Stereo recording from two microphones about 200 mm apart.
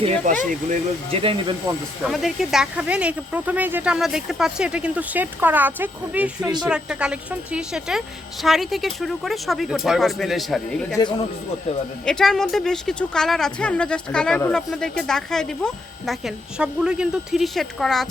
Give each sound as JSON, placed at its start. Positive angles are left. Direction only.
{"t": 0.7, "sound": "speech", "side_deg": -30}
{"t": 2.0, "sound": "speech", "side_deg": 0}
{"t": 12.0, "sound": "speech", "side_deg": 5}